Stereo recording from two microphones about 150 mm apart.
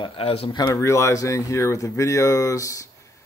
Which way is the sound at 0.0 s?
35° left (ahead or behind).